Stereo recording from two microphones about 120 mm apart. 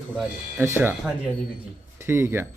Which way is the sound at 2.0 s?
20° right (ahead or behind).